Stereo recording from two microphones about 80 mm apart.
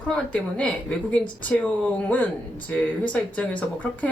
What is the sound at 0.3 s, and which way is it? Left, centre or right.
A woman's voice, centre.